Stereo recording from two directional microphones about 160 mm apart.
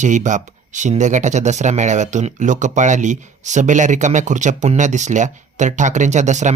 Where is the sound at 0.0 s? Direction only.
50° right (ahead or behind).